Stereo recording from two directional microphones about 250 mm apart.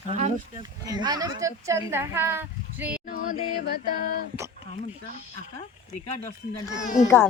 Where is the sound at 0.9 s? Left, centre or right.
Centre.